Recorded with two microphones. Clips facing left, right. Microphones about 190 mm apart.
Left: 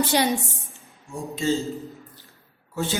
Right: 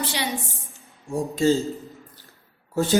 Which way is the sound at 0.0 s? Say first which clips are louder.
Left 7 dB; 45° left (ahead or behind).